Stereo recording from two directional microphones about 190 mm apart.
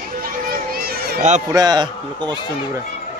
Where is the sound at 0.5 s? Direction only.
55° right (ahead or behind).